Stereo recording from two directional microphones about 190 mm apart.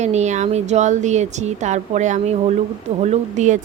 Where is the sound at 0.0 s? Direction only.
35° right (ahead or behind).